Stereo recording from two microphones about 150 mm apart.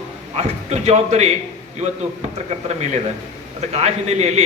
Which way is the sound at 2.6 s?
50° right (ahead or behind).